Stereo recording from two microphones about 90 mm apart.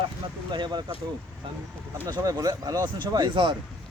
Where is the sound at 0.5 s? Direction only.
55° right (ahead or behind).